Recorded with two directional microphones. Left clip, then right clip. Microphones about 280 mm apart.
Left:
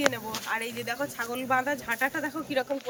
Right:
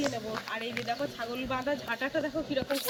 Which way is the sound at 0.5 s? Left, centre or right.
Centre.